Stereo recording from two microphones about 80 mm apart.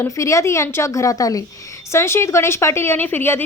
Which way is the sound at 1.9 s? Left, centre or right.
Left.